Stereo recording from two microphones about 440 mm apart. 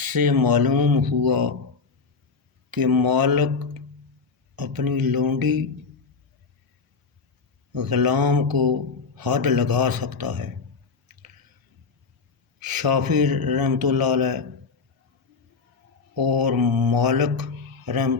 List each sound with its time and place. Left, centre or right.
0.0 s speech: right
2.6 s speech: right
7.7 s speech: right
12.5 s speech: right
16.1 s speech: right